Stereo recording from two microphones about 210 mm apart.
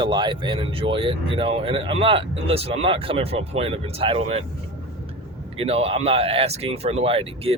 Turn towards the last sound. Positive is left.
turn(degrees=-30)  # may be behind; listen again after turning